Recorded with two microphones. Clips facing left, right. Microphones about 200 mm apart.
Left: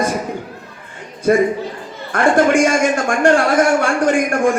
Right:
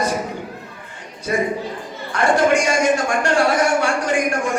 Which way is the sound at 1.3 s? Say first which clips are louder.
Left 7 dB; 55° left (ahead or behind).